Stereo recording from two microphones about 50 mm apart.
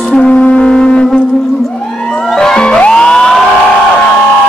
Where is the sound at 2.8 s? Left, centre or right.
Centre.